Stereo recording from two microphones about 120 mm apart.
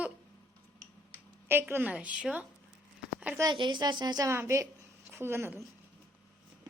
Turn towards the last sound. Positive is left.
turn(degrees=-20)  # may be behind; listen again after turning